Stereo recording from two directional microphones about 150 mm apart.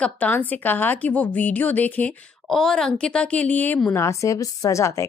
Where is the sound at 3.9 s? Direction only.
20° left (ahead or behind).